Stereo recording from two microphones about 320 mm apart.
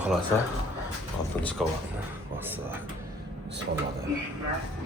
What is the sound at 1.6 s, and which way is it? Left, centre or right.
A man's voice, centre.